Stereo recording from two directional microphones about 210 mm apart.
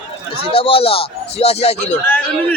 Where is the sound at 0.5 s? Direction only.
25° left (ahead or behind).